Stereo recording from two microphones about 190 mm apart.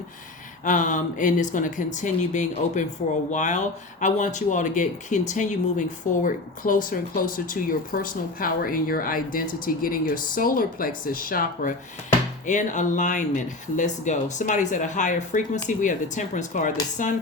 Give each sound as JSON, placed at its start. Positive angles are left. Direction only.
{"t": 0.6, "sound": "speech", "side_deg": 40}